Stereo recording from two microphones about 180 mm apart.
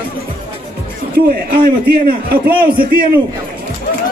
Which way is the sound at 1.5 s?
55° right (ahead or behind).